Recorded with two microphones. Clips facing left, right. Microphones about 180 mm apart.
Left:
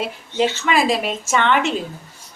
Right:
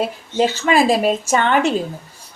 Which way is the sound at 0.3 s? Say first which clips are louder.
Right 3 dB; 40° right (ahead or behind).